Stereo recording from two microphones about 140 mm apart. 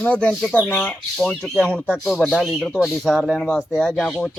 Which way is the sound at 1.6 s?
10° right (ahead or behind).